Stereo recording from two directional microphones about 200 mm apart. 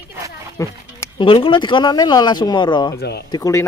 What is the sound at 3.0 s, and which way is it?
Speech, 55° left (ahead or behind).